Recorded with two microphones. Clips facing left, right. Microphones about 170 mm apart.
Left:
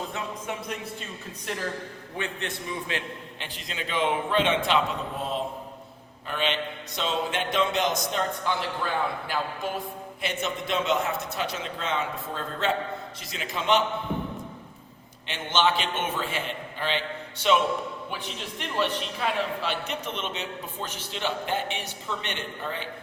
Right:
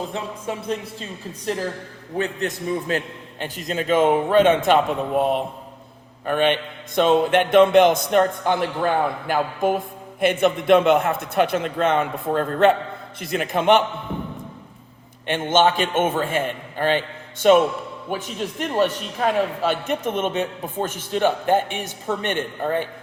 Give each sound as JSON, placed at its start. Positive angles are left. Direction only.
{"t": 0.1, "sound": "speech", "side_deg": -30}
{"t": 2.1, "sound": "a man's voice", "side_deg": -40}
{"t": 6.2, "sound": "a man's voice", "side_deg": -55}
{"t": 15.3, "sound": "a man's voice", "side_deg": -50}